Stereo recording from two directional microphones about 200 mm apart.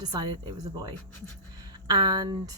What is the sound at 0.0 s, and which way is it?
Speech, 20° right (ahead or behind).